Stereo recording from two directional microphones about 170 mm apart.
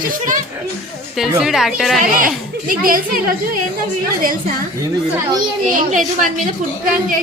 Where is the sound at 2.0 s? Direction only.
55° right (ahead or behind).